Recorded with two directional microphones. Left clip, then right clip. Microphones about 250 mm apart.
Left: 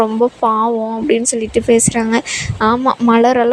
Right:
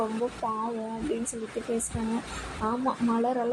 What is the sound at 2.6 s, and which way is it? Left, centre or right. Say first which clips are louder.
Speech: left 15 dB; left.